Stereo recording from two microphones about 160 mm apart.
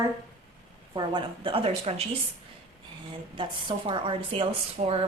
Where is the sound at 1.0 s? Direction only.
30° right (ahead or behind).